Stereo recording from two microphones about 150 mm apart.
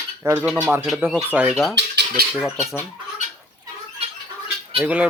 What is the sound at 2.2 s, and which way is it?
Cutlery, 90° right.